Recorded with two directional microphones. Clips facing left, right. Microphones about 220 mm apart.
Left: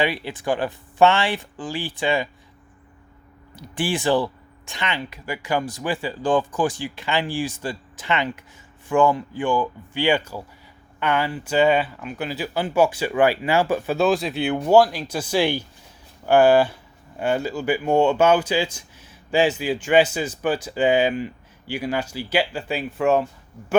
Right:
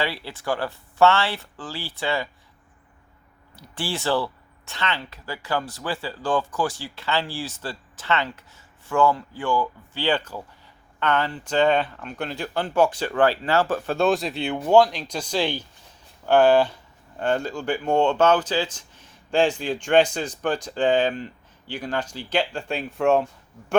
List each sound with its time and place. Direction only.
0.0 s speech: 15° left (ahead or behind)
3.5 s speech: 15° left (ahead or behind)